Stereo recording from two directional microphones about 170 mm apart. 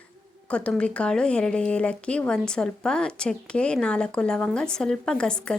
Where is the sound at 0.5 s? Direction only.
5° left (ahead or behind).